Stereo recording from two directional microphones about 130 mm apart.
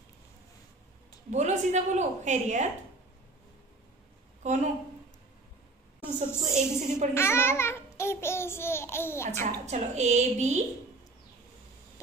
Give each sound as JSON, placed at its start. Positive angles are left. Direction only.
{"t": 1.3, "sound": "a woman's voice", "side_deg": -65}
{"t": 4.4, "sound": "a woman's voice", "side_deg": -65}
{"t": 6.4, "sound": "a woman's voice", "side_deg": -65}
{"t": 7.2, "sound": "babbling", "side_deg": 20}
{"t": 9.3, "sound": "a woman's voice", "side_deg": -60}